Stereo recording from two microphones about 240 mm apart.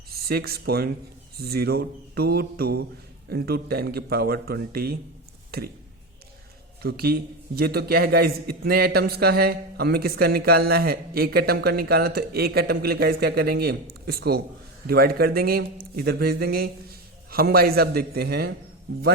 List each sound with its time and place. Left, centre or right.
0.1 s a man's voice: right
5.5 s a sound: right
6.8 s a man's voice: right